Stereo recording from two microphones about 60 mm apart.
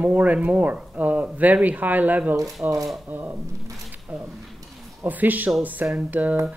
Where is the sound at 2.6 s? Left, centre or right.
Right.